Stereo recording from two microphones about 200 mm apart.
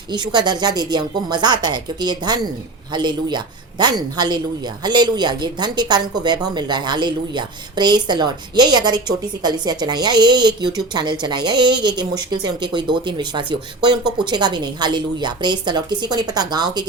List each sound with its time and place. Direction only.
0.1 s speech: 20° right (ahead or behind)